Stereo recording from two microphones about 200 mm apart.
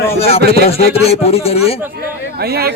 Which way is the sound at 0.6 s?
30° left (ahead or behind).